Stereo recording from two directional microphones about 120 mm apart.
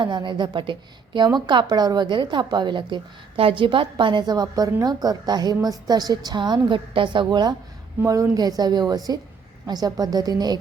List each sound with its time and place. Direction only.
0.0 s a woman's voice: 40° right (ahead or behind)